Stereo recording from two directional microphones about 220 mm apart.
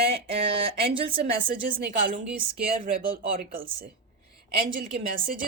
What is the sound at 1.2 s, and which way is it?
Speech, 40° right (ahead or behind).